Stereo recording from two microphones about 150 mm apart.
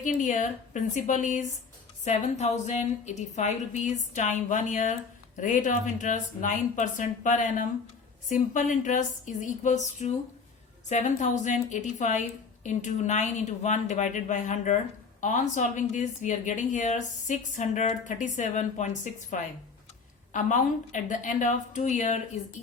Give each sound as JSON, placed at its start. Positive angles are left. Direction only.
{"t": 0.0, "sound": "a woman's voice", "side_deg": 60}